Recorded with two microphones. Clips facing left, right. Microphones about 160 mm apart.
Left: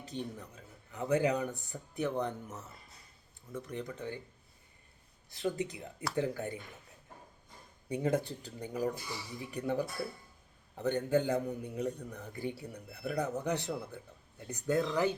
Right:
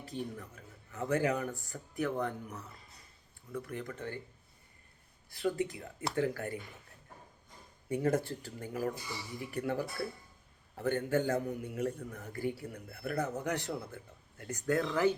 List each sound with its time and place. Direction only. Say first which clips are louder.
0.0 s speech: even; 20° left (ahead or behind)
5.3 s speech: right 2 dB; 20° left (ahead or behind)
7.9 s speech: right 1 dB; 15° left (ahead or behind)